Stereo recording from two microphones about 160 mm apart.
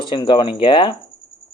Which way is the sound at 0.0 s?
30° left (ahead or behind).